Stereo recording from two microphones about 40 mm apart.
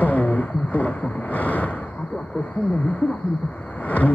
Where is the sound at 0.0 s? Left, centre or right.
Left.